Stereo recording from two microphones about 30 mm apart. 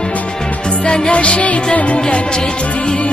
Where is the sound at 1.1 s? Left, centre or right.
Left.